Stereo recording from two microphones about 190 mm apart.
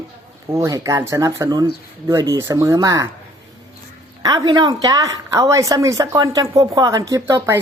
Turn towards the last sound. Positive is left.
turn(degrees=-15)  # may be behind; listen again after turning